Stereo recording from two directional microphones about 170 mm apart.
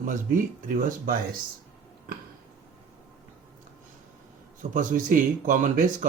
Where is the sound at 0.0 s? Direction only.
50° right (ahead or behind).